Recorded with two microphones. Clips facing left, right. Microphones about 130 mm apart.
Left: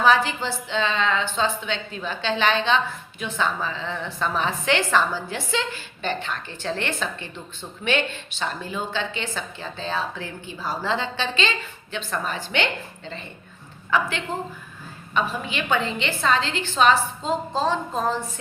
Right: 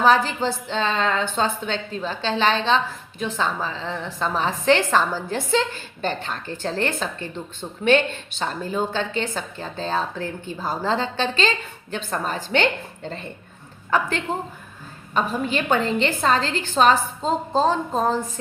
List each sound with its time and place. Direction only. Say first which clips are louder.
0.0 s a woman's voice: right 2 dB; 40° right (ahead or behind)
15.4 s a woman's voice: right 3 dB; 40° right (ahead or behind)